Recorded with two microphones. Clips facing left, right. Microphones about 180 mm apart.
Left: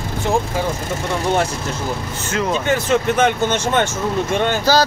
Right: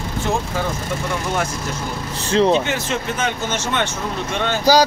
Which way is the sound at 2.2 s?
30° right (ahead or behind).